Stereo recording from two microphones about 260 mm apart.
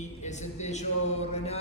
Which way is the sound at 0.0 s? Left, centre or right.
Left.